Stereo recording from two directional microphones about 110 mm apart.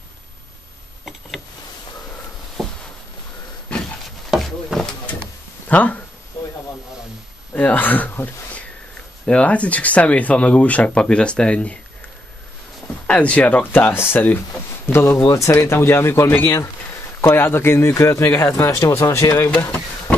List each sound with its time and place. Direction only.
4.3 s a sound: centre (ahead or behind)
5.7 s speech: 15° left (ahead or behind)
7.5 s speech: 15° left (ahead or behind)
13.0 s speech: 10° left (ahead or behind)
16.5 s a sound: 25° left (ahead or behind)
17.3 s speech: 20° left (ahead or behind)
19.5 s speech: 15° left (ahead or behind)